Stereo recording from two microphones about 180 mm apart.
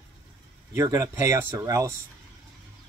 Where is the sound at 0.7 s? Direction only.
20° right (ahead or behind).